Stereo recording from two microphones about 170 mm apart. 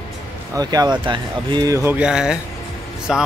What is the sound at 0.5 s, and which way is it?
Speech, 25° right (ahead or behind).